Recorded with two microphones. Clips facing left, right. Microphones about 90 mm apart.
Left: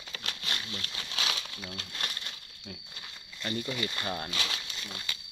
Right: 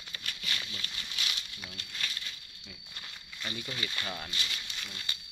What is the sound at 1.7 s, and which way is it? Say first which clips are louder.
Speech: left 4 dB; 90° left.